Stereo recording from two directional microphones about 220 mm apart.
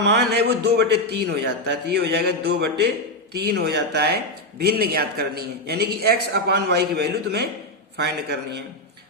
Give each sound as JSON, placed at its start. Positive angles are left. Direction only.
{"t": 0.0, "sound": "a man's voice", "side_deg": -45}